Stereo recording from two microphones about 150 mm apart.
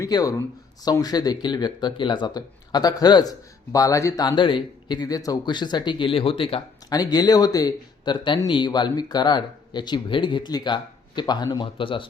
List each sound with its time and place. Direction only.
0.0 s a man's voice: 25° left (ahead or behind)